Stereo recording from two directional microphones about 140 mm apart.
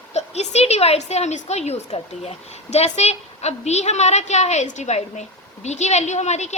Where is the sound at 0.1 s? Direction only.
50° left (ahead or behind).